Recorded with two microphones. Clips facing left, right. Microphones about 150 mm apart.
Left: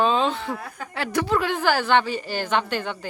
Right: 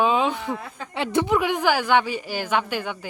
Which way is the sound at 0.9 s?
20° right (ahead or behind).